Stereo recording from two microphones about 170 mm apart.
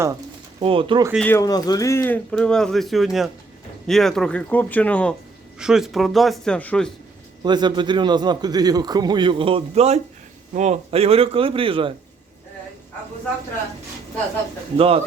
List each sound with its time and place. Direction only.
0.6 s a man's voice: 30° right (ahead or behind)
1.2 s speech: 15° left (ahead or behind)
2.3 s speech: 5° left (ahead or behind)
5.5 s speech: 5° right (ahead or behind)
7.4 s a man's voice: 25° right (ahead or behind)
14.8 s a man's voice: 35° right (ahead or behind)